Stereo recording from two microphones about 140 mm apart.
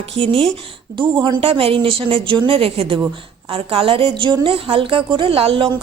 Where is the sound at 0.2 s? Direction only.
40° right (ahead or behind).